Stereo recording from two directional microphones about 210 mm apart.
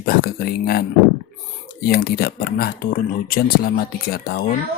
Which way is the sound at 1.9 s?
50° left (ahead or behind).